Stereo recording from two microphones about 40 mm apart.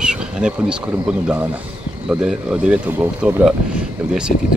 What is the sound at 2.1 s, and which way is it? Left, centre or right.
Speech, right.